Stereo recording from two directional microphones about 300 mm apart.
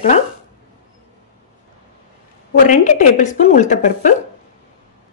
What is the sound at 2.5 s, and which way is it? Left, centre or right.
A woman's voice, left.